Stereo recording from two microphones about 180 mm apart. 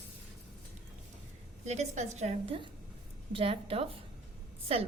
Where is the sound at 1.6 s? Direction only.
40° right (ahead or behind).